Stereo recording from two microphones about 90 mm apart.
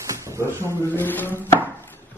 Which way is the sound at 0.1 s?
35° right (ahead or behind).